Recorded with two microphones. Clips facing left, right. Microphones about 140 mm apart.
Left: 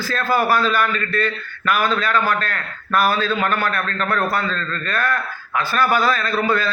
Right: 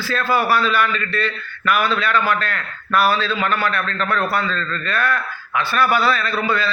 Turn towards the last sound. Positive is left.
turn(degrees=45)  # may be behind; listen again after turning